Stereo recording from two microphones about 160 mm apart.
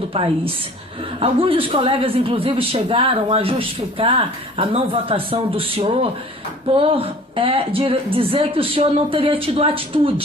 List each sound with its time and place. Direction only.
1.2 s a woman's voice: 35° right (ahead or behind)